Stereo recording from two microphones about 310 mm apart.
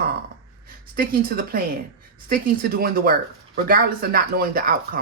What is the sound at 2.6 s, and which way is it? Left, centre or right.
Speech, right.